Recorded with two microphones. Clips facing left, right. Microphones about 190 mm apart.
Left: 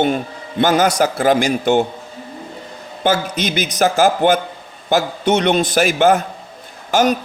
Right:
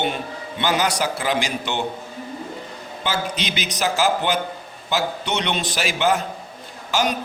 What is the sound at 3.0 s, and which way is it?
A man's voice, 50° left (ahead or behind).